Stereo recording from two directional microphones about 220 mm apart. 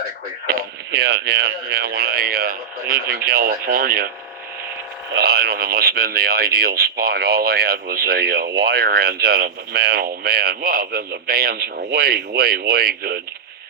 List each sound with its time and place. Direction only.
0.4 s speech: 50° right (ahead or behind)
5.2 s speech: 45° right (ahead or behind)